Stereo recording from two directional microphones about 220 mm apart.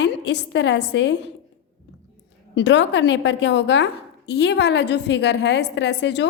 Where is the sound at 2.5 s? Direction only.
55° left (ahead or behind).